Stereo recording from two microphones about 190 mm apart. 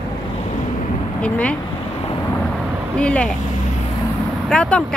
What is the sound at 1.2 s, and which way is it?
Speech, 5° left (ahead or behind).